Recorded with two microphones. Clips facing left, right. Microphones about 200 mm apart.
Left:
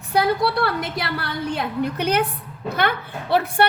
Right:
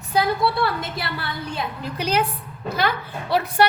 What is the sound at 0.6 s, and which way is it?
A woman's voice, 65° left (ahead or behind).